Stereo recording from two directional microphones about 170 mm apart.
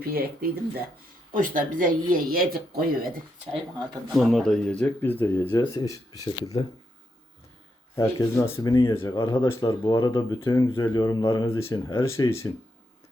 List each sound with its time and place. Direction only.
0.0 s speech: 65° right (ahead or behind)
1.3 s speech: 55° right (ahead or behind)
3.5 s speech: centre (ahead or behind); by 6.7 s 25° left (ahead or behind)
7.9 s speech: 20° left (ahead or behind)
9.1 s speech: 25° left (ahead or behind)